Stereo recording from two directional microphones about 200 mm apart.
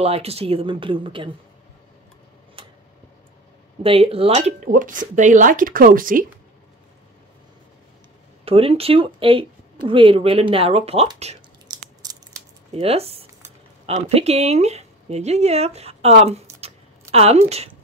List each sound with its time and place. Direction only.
0.0 s speech: 30° right (ahead or behind)
2.6 s tick-tock: 25° right (ahead or behind)
3.8 s speech: 30° right (ahead or behind); by 6.2 s 45° right (ahead or behind)
8.5 s speech: 30° right (ahead or behind)
11.6 s a sound: 20° right (ahead or behind)
12.7 s speech: 30° right (ahead or behind)
16.6 s a sound: 30° right (ahead or behind)